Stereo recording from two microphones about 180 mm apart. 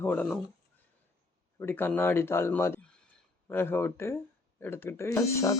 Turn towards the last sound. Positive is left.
turn(degrees=15)  # may be behind; listen again after turning